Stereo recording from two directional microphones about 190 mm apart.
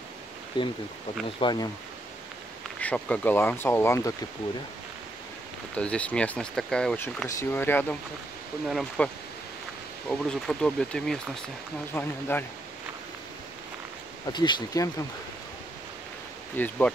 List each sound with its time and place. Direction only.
1.4 s speech: 25° left (ahead or behind)
2.8 s speech: 5° left (ahead or behind)
5.8 s speech: 5° left (ahead or behind)
14.2 s speech: 25° left (ahead or behind)
16.5 s speech: 10° left (ahead or behind)